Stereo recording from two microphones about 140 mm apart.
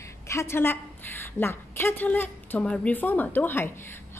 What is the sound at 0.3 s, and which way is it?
A woman's voice, 20° left (ahead or behind).